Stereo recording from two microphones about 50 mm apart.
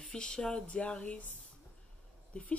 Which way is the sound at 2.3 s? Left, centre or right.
Left.